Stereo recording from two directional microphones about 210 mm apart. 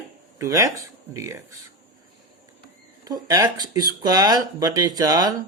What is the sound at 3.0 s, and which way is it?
Speech, 20° right (ahead or behind).